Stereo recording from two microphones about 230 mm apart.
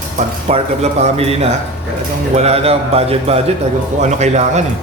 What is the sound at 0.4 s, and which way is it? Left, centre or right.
A man's voice, right.